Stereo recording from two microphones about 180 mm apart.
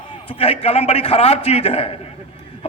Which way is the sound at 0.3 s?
35° left (ahead or behind).